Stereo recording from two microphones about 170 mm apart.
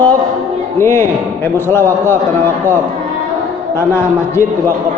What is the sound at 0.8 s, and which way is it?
A man's voice, 15° left (ahead or behind).